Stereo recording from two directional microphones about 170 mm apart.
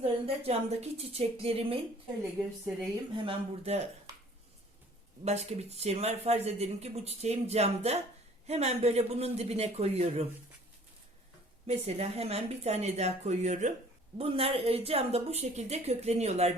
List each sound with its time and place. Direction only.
0.0 s speech: 35° right (ahead or behind)
3.2 s speech: 35° right (ahead or behind)
5.2 s speech: 40° right (ahead or behind)
11.6 s speech: 35° right (ahead or behind)